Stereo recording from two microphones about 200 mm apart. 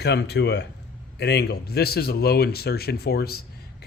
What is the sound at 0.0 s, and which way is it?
Speech, 55° left (ahead or behind).